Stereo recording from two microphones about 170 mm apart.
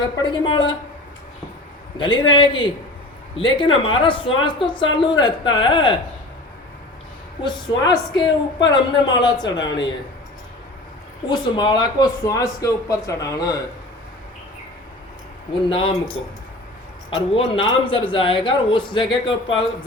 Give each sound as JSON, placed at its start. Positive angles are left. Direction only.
{"t": 0.0, "sound": "speech", "side_deg": 25}
{"t": 2.0, "sound": "speech", "side_deg": 30}
{"t": 7.4, "sound": "speech", "side_deg": 25}
{"t": 11.3, "sound": "speech", "side_deg": 25}
{"t": 15.7, "sound": "speech", "side_deg": 30}
{"t": 17.5, "sound": "speech", "side_deg": 30}